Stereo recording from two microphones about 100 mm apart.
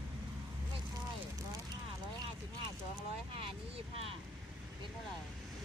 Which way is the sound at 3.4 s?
75° right (ahead or behind).